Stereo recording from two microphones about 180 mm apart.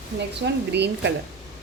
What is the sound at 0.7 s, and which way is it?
Speech, 70° right (ahead or behind).